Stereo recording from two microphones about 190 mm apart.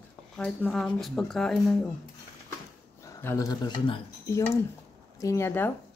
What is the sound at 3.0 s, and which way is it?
Speech, 15° left (ahead or behind).